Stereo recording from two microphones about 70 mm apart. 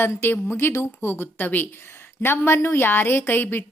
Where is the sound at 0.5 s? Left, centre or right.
Left.